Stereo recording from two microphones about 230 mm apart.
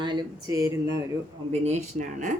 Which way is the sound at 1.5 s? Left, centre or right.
Right.